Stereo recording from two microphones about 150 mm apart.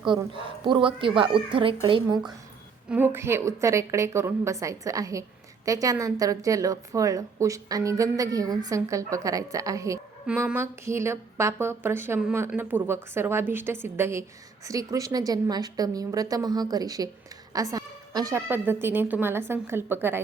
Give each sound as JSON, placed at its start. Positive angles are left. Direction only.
{"t": 0.3, "sound": "speech", "side_deg": -35}
{"t": 2.0, "sound": "a woman's voice", "side_deg": -25}
{"t": 2.9, "sound": "a woman's voice", "side_deg": -15}